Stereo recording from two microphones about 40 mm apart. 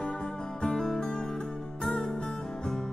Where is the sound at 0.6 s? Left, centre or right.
Centre.